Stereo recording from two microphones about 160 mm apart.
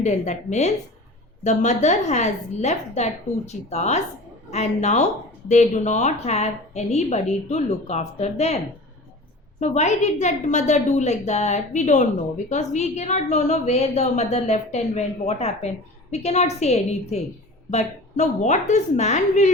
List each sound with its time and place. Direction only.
0.0 s a woman's voice: 45° left (ahead or behind)